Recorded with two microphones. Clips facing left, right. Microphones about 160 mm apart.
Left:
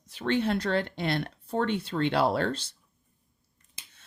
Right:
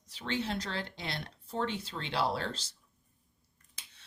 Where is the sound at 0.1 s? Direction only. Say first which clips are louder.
Left 8 dB; 55° left (ahead or behind).